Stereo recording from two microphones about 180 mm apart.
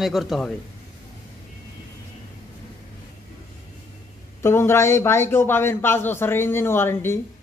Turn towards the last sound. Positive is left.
turn(degrees=15)  # may be behind; listen again after turning